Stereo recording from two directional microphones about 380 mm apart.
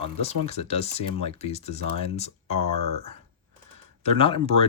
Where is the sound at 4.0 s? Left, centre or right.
Centre.